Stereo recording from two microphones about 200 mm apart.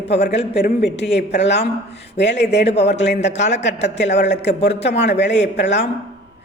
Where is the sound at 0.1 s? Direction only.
60° left (ahead or behind).